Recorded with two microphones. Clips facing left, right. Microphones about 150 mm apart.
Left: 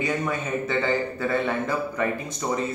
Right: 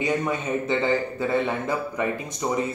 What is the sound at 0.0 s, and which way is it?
A man's voice, 20° right (ahead or behind).